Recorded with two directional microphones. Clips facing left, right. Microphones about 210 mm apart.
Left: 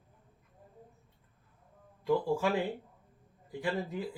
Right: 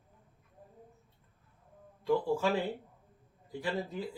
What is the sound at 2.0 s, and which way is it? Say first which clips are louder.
Speech: even; 15° left (ahead or behind).